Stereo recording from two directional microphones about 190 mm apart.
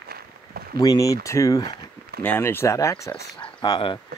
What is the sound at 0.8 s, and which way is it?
Speech, 20° left (ahead or behind).